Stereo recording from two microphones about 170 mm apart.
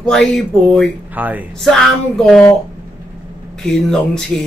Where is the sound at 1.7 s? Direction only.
Centre (ahead or behind).